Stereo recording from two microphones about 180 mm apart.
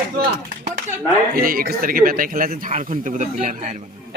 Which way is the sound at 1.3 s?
55° right (ahead or behind).